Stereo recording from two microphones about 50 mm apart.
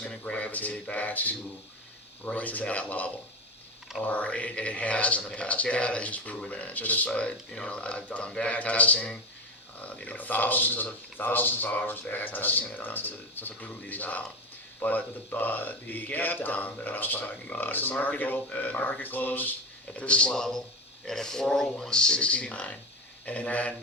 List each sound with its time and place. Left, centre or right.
0.1 s speech: left
20.0 s speech: left
20.3 s speech: centre; by 23.7 s left